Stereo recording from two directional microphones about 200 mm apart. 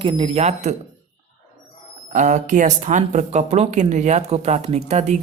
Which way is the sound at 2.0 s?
35° right (ahead or behind).